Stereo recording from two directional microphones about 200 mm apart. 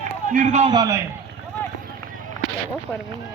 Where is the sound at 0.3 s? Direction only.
35° right (ahead or behind).